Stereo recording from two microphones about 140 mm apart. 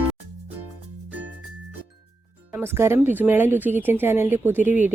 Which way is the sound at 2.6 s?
15° right (ahead or behind).